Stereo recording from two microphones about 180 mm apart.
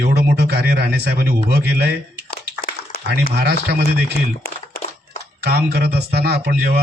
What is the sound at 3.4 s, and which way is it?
Speech, 65° right (ahead or behind).